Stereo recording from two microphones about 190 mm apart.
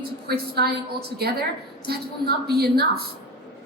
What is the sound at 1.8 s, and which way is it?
A woman's voice, 55° right (ahead or behind).